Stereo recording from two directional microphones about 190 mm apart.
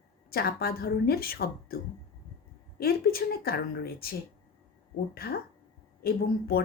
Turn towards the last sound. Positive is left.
turn(degrees=55)  # may be behind; listen again after turning